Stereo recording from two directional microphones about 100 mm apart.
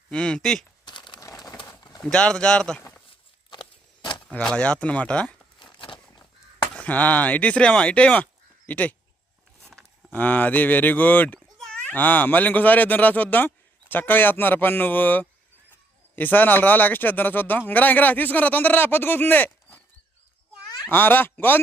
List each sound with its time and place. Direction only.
0.1 s speech: 10° left (ahead or behind)
0.9 s crumpling: 50° left (ahead or behind)
1.2 s crumpling: 35° left (ahead or behind)
1.5 s a sound: 40° left (ahead or behind)
2.0 s speech: 5° left (ahead or behind)
3.1 s a sound: 50° left (ahead or behind)
4.3 s speech: 10° left (ahead or behind)
5.5 s a sound: 50° left (ahead or behind)
6.7 s speech: 15° left (ahead or behind)
10.1 s speech: 15° left (ahead or behind)
11.3 s a man's voice: 5° left (ahead or behind)
20.9 s a man's voice: 20° left (ahead or behind)